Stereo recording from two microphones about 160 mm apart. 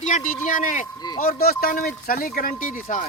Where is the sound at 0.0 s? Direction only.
50° left (ahead or behind).